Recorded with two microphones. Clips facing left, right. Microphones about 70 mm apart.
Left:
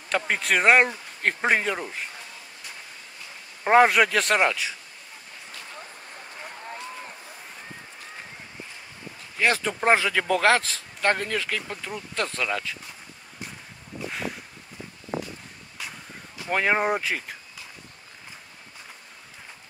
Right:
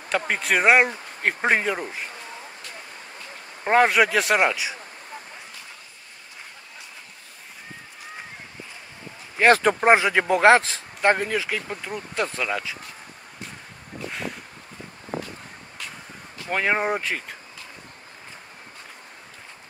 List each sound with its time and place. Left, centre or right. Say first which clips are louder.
0.3 s speech: right 1 dB; centre
3.6 s speech: left 1 dB; centre
9.4 s speech: right 7 dB; right
9.8 s speech: right 4 dB; centre
16.4 s speech: even; centre